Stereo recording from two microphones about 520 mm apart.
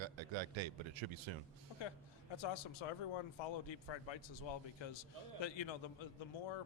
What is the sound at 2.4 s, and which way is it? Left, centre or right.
A man's voice, left.